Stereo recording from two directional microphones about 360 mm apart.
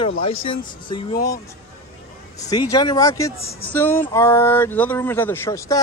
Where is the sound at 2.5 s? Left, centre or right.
Centre.